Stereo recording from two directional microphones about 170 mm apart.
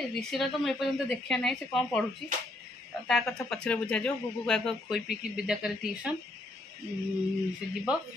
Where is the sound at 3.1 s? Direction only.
Centre (ahead or behind).